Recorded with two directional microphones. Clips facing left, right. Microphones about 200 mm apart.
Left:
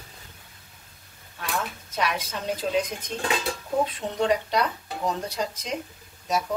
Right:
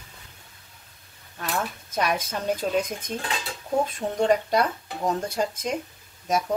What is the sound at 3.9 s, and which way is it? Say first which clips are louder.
Speech: right 2 dB; 50° right (ahead or behind).